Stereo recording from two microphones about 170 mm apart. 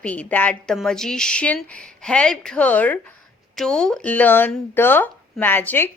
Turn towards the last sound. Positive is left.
turn(degrees=10)  # may be behind; listen again after turning